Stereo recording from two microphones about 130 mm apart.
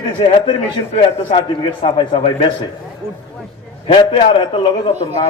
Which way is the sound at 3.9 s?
40° left (ahead or behind).